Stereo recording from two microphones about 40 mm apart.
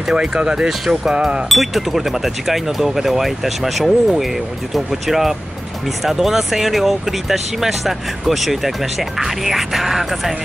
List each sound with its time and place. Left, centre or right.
0.1 s speech: centre